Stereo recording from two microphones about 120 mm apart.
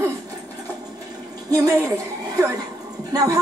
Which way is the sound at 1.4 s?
25° right (ahead or behind).